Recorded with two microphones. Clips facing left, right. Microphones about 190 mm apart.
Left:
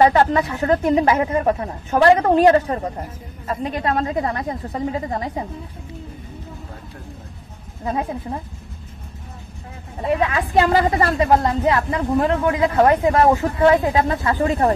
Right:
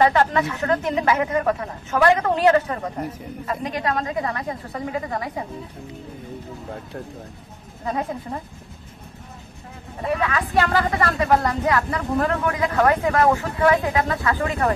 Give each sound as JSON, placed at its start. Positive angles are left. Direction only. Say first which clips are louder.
{"t": 0.0, "sound": "speech", "louder": "left 3 dB", "side_deg": 30}
{"t": 10.0, "sound": "speech", "louder": "left 3 dB", "side_deg": 25}